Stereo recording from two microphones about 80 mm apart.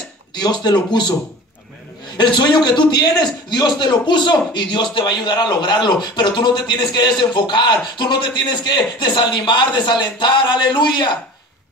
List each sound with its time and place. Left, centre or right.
0.3 s speech: left
2.1 s speech: left